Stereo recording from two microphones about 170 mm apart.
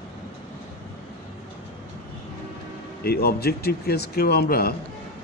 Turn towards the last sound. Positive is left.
turn(degrees=65)  # may be behind; listen again after turning